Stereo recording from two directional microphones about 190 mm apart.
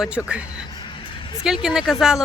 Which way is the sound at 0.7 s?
25° left (ahead or behind).